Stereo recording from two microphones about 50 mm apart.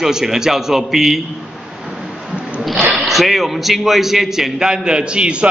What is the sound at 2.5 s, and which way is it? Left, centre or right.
A man's voice, centre.